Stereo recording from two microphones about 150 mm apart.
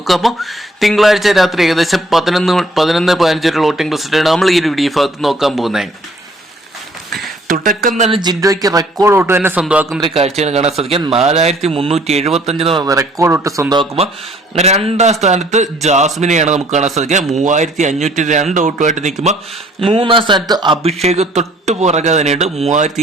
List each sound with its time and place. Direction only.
0.0 s speech: centre (ahead or behind)
7.4 s speech: 65° right (ahead or behind)
8.1 s speech: 30° right (ahead or behind); by 10.0 s 5° right (ahead or behind)
10.2 s speech: 45° right (ahead or behind)
12.8 s speech: 20° right (ahead or behind)
14.5 s speech: 45° right (ahead or behind)
19.8 s a man's voice: 40° right (ahead or behind)
20.8 s speech: 45° right (ahead or behind)